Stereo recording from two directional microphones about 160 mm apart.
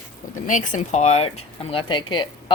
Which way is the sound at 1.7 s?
30° left (ahead or behind).